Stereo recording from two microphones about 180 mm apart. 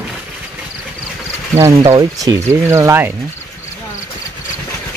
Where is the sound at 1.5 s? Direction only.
15° right (ahead or behind).